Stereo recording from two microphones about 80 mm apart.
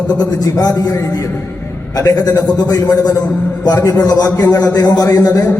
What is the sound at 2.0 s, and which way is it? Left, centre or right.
A man's voice, left.